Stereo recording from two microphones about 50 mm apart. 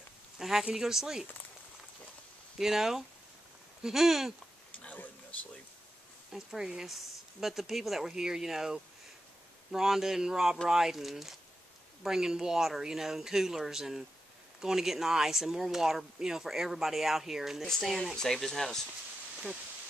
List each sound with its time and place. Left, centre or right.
0.4 s speech: centre
2.6 s speech: centre
4.8 s a sound: left
6.3 s speech: centre
17.6 s speech: centre
19.3 s a sound: centre